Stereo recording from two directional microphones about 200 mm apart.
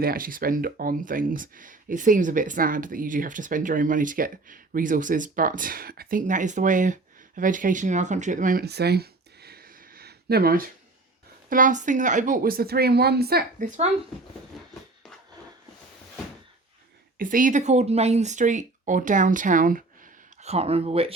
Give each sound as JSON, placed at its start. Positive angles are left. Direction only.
{"t": 0.0, "sound": "speech", "side_deg": -45}
{"t": 17.2, "sound": "speech", "side_deg": -40}